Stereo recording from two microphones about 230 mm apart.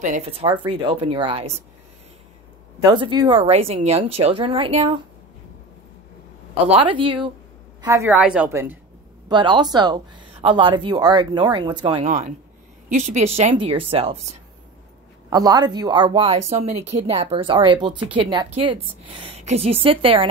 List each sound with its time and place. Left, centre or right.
0.0 s speech: right
2.8 s speech: centre
6.7 s speech: right
15.2 s speech: centre